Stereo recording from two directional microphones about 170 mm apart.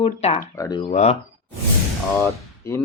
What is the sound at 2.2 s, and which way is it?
Speech, 15° left (ahead or behind).